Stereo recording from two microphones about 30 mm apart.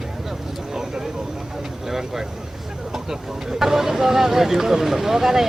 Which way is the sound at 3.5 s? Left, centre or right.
Centre.